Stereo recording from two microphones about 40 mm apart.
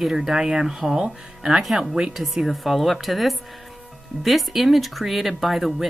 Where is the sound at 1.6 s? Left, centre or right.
Centre.